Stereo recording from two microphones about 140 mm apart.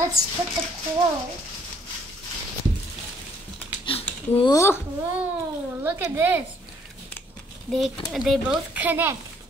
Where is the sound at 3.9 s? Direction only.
40° left (ahead or behind).